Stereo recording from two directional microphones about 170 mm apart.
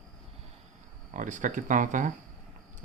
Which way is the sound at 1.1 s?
50° right (ahead or behind).